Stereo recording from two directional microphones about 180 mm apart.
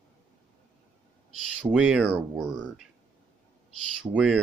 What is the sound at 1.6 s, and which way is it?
Speech, 5° right (ahead or behind).